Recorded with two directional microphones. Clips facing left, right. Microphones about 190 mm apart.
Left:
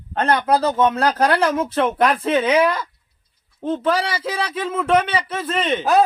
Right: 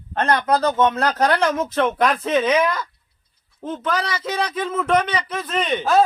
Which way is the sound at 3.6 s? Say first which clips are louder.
Left 4 dB; 30° left (ahead or behind).